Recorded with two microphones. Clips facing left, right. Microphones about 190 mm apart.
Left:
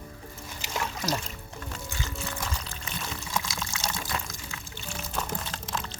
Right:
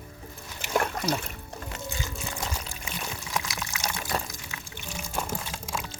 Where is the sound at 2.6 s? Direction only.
10° right (ahead or behind).